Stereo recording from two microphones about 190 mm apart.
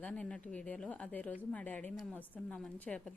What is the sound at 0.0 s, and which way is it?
A woman's voice, 5° left (ahead or behind).